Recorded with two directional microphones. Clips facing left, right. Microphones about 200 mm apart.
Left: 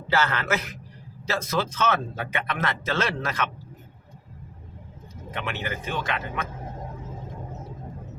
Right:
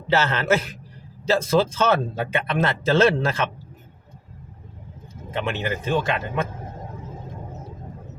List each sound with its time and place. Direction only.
0.1 s speech: 25° right (ahead or behind)
5.3 s speech: 25° right (ahead or behind)